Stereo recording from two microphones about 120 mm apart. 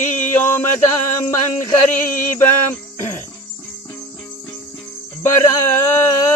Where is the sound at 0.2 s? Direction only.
15° left (ahead or behind).